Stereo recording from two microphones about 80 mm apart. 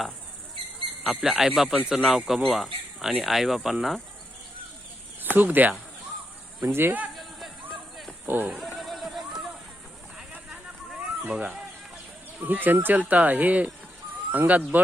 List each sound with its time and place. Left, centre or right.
1.2 s speech: centre
1.7 s speech: centre
2.0 s speech: centre
5.4 s speech: right
7.2 s a sound: centre
8.3 s speech: right
8.5 s a sound: centre
10.3 s a sound: centre
12.4 s speech: right